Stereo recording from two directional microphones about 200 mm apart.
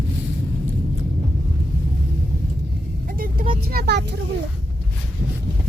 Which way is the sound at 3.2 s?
45° right (ahead or behind).